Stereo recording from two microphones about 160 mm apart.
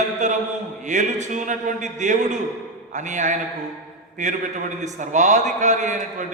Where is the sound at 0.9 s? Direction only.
50° right (ahead or behind).